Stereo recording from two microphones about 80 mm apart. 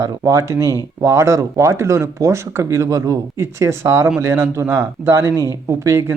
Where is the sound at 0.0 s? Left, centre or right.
Right.